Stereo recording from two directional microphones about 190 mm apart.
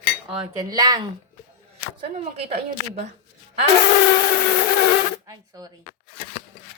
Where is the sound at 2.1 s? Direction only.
35° right (ahead or behind).